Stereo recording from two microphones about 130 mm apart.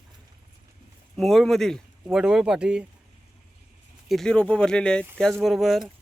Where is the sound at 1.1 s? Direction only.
Centre (ahead or behind).